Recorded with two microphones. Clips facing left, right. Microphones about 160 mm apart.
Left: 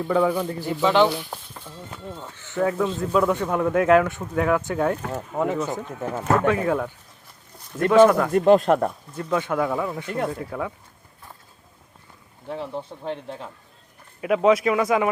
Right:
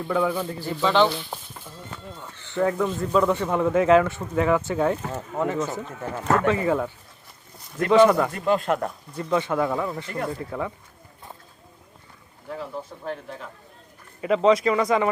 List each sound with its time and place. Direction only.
0.1 s speech: 10° left (ahead or behind)
5.1 s speech: 15° left (ahead or behind)
6.2 s speech: 5° left (ahead or behind)
8.3 s speech: 45° left (ahead or behind)
9.1 s speech: 5° left (ahead or behind)
12.5 s speech: 25° left (ahead or behind)
14.2 s speech: 5° left (ahead or behind)